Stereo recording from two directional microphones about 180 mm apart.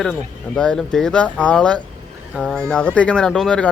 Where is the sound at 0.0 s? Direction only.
5° left (ahead or behind).